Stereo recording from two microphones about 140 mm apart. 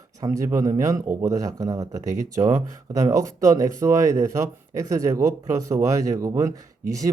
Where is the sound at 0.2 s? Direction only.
25° right (ahead or behind).